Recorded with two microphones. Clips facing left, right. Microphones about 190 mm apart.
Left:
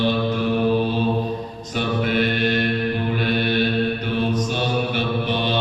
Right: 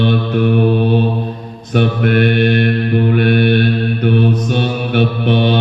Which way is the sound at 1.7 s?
60° right (ahead or behind).